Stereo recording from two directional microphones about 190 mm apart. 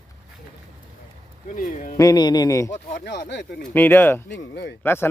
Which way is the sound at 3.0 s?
60° left (ahead or behind).